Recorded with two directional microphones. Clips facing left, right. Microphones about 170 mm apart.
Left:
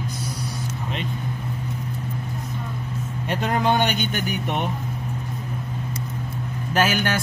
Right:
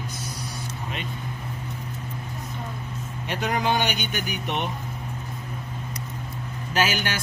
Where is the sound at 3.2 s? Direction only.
50° left (ahead or behind).